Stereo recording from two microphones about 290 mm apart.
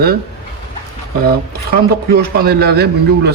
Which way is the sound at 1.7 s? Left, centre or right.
Right.